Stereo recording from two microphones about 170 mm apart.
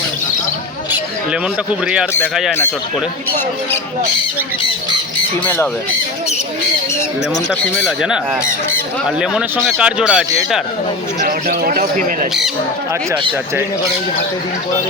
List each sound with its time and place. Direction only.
7.9 s speech: 5° right (ahead or behind)
11.2 s speech: 50° right (ahead or behind)